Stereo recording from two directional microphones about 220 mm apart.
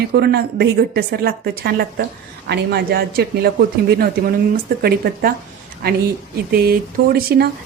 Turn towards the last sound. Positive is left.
turn(degrees=-45)  # may be behind; listen again after turning